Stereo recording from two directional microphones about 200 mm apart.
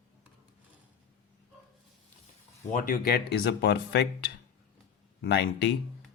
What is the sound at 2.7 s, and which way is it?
Speech, 45° left (ahead or behind).